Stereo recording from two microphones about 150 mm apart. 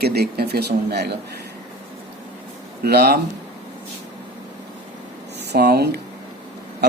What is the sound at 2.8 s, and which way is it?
Speech, 90° right.